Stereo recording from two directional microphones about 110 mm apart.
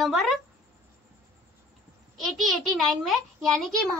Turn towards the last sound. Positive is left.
turn(degrees=5)  # may be behind; listen again after turning